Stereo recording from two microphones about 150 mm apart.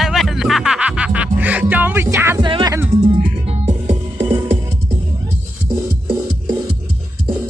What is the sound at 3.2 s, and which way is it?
Music, 45° right (ahead or behind).